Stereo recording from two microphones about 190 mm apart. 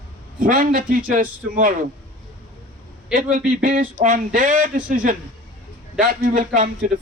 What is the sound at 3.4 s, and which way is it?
A man's voice, 45° right (ahead or behind).